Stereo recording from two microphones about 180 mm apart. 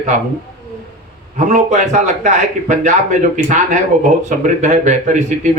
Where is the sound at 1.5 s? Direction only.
40° right (ahead or behind).